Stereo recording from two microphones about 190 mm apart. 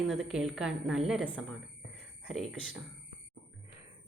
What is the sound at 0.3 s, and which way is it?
A woman's voice, centre (ahead or behind).